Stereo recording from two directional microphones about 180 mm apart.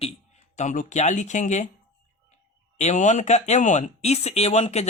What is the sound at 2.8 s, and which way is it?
Speech, 40° left (ahead or behind).